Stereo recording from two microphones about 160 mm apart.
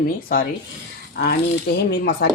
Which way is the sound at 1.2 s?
90° left.